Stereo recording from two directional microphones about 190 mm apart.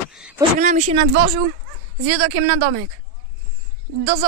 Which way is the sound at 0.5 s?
40° right (ahead or behind).